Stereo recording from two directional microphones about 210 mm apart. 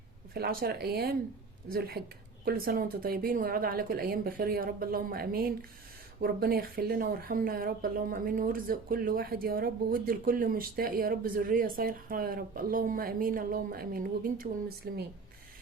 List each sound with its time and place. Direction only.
0.3 s speech: 45° right (ahead or behind)